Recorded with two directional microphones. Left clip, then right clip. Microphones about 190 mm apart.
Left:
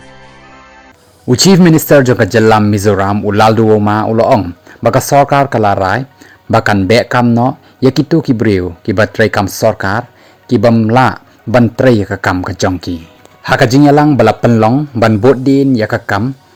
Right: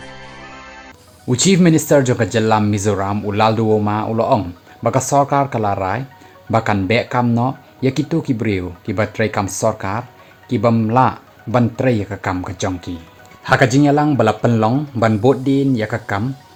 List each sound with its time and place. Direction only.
0.0 s music: centre (ahead or behind)
1.4 s speech: 45° left (ahead or behind)